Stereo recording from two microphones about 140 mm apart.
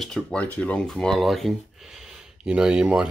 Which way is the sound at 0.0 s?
5° left (ahead or behind).